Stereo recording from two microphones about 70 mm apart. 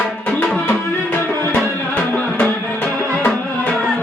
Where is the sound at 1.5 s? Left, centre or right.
Left.